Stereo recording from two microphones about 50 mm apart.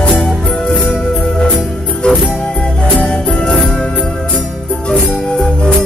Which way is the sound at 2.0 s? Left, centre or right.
Centre.